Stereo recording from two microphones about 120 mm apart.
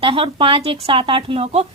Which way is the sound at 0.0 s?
45° right (ahead or behind).